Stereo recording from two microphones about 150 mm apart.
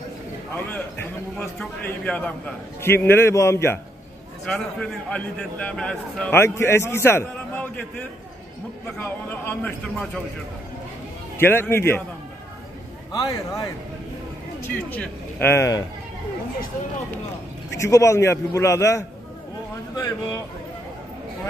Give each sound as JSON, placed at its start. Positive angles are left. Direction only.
{"t": 0.6, "sound": "a man's voice", "side_deg": 10}
{"t": 4.5, "sound": "a man's voice", "side_deg": 5}
{"t": 9.0, "sound": "a man's voice", "side_deg": 15}
{"t": 11.3, "sound": "a man's voice", "side_deg": 15}
{"t": 13.1, "sound": "a man's voice", "side_deg": 25}
{"t": 17.7, "sound": "a man's voice", "side_deg": 20}